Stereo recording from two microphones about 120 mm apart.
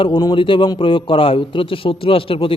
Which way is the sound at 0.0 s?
40° left (ahead or behind).